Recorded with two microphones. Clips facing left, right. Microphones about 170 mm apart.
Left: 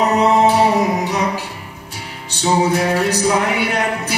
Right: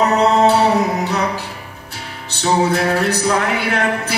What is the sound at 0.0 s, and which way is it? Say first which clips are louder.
Music: even; 15° left (ahead or behind).